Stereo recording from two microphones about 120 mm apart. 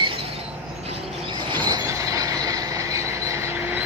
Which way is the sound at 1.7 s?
30° right (ahead or behind).